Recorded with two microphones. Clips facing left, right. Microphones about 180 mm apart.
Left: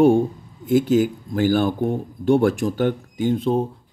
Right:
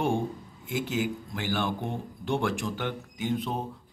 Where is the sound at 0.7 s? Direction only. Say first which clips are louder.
Left 12 dB; 40° left (ahead or behind).